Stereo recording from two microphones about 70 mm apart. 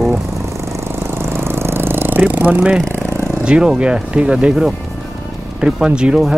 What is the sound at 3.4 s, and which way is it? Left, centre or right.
Speech, centre.